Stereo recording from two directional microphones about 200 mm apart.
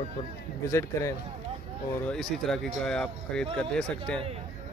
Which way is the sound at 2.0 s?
Centre (ahead or behind).